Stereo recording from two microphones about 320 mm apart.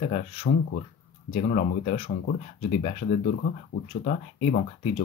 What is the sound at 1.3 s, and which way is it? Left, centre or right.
Speech, centre.